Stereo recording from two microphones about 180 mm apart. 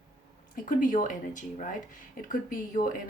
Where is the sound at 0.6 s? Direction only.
45° left (ahead or behind).